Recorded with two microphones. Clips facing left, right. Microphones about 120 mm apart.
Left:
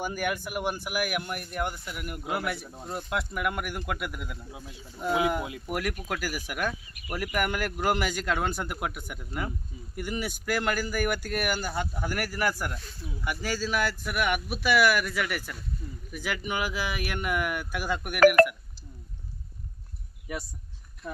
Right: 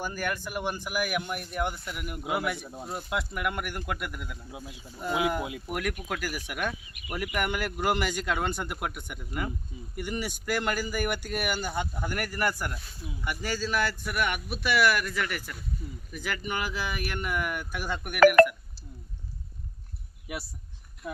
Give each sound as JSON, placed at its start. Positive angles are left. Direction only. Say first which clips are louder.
{"t": 0.0, "sound": "speech", "louder": "left 2 dB", "side_deg": 15}
{"t": 5.4, "sound": "speech", "louder": "right 1 dB", "side_deg": -15}
{"t": 5.6, "sound": "speech", "louder": "left 1 dB", "side_deg": 0}
{"t": 15.8, "sound": "speech", "louder": "even", "side_deg": -10}
{"t": 16.1, "sound": "speech", "louder": "left 1 dB", "side_deg": 5}
{"t": 21.0, "sound": "speech", "louder": "right 1 dB", "side_deg": -10}